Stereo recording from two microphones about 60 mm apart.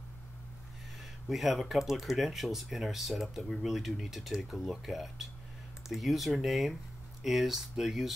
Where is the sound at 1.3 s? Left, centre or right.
Centre.